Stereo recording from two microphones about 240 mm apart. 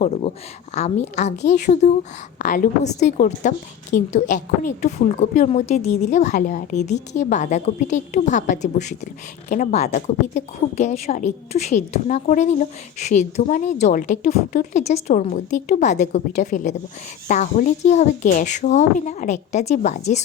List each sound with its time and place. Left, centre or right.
0.0 s a woman's voice: left